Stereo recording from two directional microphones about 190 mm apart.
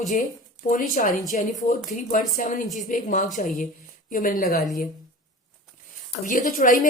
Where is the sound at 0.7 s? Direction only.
45° left (ahead or behind).